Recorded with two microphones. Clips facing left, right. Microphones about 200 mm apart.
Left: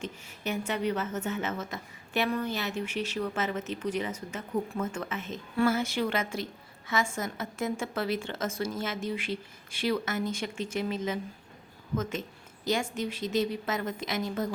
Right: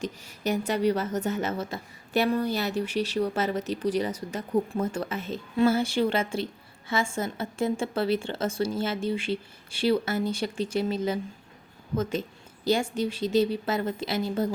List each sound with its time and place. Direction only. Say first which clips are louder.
0.0 s a woman's voice: right 5 dB; 40° right (ahead or behind)